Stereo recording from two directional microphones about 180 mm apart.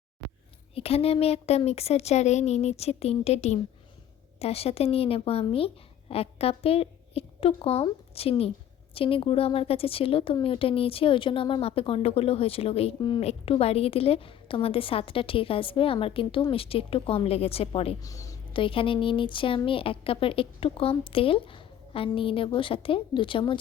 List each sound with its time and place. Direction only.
0.8 s a woman's voice: 35° left (ahead or behind)
18.0 s speech: 20° left (ahead or behind)